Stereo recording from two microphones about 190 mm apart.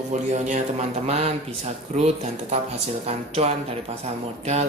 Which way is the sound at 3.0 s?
35° right (ahead or behind).